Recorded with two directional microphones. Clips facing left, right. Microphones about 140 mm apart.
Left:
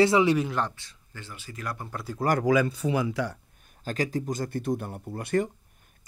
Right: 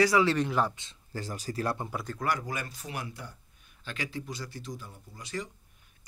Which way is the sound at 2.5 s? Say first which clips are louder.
Left 15 dB; 90° left.